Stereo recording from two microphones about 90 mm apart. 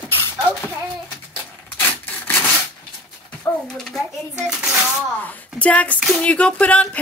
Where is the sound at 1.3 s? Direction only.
20° left (ahead or behind).